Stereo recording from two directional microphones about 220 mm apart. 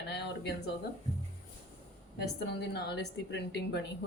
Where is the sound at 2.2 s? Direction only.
45° left (ahead or behind).